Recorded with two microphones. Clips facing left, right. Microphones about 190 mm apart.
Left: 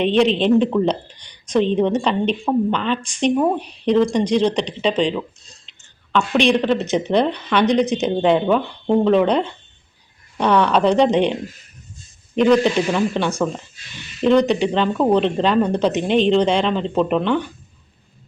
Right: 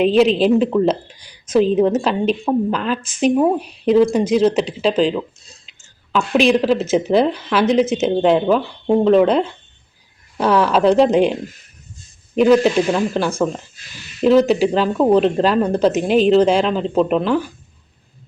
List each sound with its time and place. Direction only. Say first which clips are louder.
0.0 s speech: right 3 dB; 5° right (ahead or behind)
12.4 s speech: right 2 dB; 5° right (ahead or behind)